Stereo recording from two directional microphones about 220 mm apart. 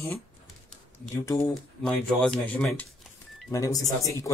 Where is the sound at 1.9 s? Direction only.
5° left (ahead or behind).